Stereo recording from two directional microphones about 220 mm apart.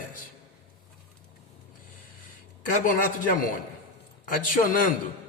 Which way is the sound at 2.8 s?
35° left (ahead or behind).